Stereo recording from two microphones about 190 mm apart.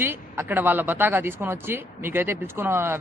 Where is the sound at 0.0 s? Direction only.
10° right (ahead or behind).